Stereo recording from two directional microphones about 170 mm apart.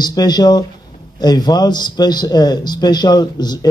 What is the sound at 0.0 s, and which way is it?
A man's voice, 25° left (ahead or behind).